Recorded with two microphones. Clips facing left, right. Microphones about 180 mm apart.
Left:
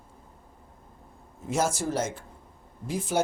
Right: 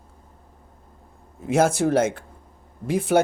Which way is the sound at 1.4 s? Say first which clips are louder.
Right 8 dB; 60° right (ahead or behind).